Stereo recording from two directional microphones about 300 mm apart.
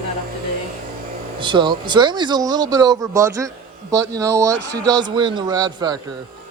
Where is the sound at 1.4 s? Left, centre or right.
Centre.